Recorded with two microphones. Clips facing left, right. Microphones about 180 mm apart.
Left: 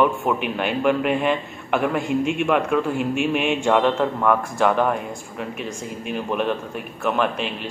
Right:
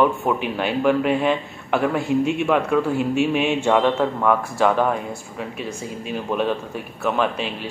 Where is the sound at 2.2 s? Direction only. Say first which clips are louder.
Right 1 dB; 55° left (ahead or behind).